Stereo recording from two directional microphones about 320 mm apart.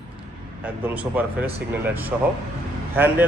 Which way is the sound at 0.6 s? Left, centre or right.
Centre.